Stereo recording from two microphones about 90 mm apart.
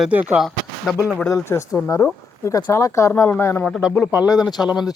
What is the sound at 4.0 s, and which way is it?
Speech, 40° left (ahead or behind).